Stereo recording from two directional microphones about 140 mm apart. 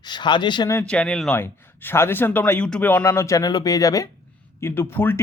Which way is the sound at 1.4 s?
15° left (ahead or behind).